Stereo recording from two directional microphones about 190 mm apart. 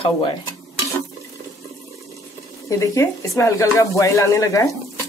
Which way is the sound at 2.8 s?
15° left (ahead or behind).